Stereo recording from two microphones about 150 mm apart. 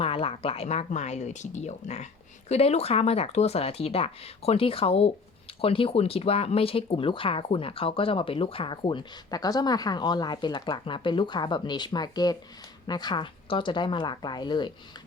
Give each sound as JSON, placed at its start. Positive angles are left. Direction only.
{"t": 0.0, "sound": "speech", "side_deg": 40}